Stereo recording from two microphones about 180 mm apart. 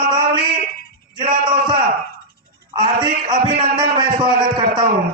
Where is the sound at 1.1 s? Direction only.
25° right (ahead or behind).